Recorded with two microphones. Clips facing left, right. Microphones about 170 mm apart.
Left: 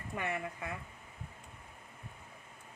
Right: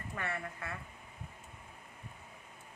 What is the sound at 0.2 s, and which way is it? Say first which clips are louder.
Speech: left 3 dB; 15° left (ahead or behind).